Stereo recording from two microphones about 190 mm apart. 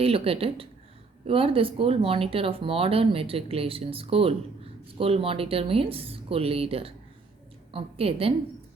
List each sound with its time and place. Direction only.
0.0 s a woman's voice: 30° right (ahead or behind)